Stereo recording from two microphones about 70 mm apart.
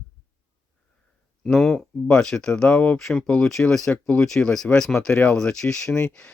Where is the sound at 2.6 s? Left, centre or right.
Centre.